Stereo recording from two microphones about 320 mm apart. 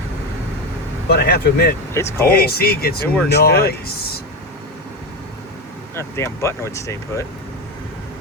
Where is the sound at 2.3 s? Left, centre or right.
Left.